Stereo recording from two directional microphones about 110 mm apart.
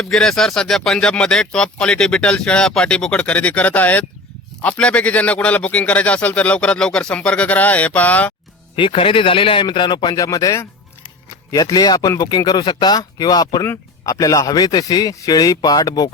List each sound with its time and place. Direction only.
0.0 s speech: 5° left (ahead or behind)
8.7 s a man's voice: 55° left (ahead or behind)
10.2 s speech: 30° left (ahead or behind)